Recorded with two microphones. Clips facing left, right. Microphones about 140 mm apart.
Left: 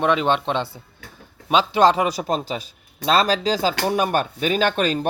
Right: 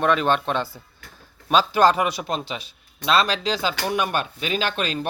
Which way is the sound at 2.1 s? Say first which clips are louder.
Left 4 dB; 35° left (ahead or behind).